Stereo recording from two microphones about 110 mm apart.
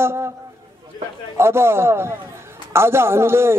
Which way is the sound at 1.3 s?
25° right (ahead or behind).